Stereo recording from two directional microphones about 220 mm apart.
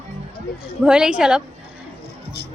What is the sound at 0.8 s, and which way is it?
Speech, 5° right (ahead or behind).